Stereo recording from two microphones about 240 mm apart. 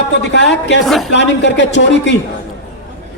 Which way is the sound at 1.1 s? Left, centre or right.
Left.